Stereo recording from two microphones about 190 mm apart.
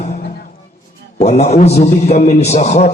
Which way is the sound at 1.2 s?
35° left (ahead or behind).